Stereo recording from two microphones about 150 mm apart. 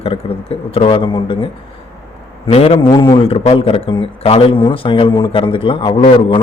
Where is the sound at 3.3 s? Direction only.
40° left (ahead or behind).